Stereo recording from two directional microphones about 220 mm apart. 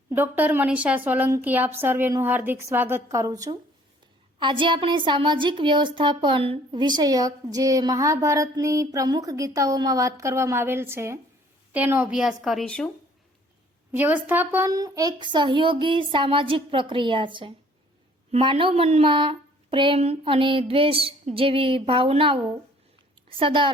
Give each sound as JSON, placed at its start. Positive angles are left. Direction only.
{"t": 0.1, "sound": "a woman's voice", "side_deg": -10}
{"t": 13.9, "sound": "a woman's voice", "side_deg": -10}
{"t": 23.4, "sound": "a woman's voice", "side_deg": -20}